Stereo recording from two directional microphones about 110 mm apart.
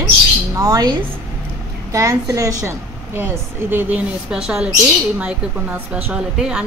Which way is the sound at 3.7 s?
15° right (ahead or behind).